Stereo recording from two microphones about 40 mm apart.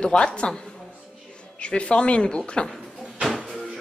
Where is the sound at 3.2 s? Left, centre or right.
Centre.